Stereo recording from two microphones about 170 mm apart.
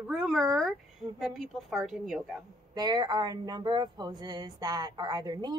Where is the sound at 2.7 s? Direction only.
25° right (ahead or behind).